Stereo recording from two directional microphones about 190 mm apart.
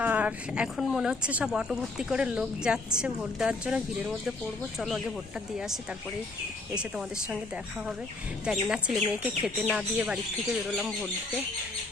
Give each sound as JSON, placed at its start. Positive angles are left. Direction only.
{"t": 0.0, "sound": "speech", "side_deg": -10}
{"t": 5.5, "sound": "speech", "side_deg": 0}